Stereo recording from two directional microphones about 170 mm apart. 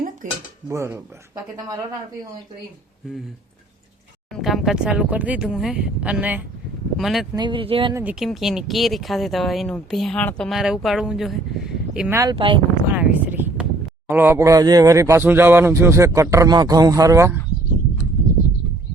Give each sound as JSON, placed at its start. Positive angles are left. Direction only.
{"t": 0.2, "sound": "speech", "side_deg": -50}
{"t": 0.7, "sound": "speech", "side_deg": -15}
{"t": 4.3, "sound": "speech", "side_deg": 0}
{"t": 7.3, "sound": "speech", "side_deg": -30}
{"t": 7.9, "sound": "speech", "side_deg": -5}
{"t": 12.1, "sound": "speech", "side_deg": -25}
{"t": 12.9, "sound": "a sound", "side_deg": -10}
{"t": 14.1, "sound": "speech", "side_deg": -15}